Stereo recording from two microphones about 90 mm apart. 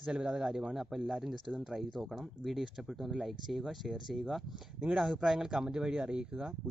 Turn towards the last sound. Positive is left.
turn(degrees=-10)  # may be behind; listen again after turning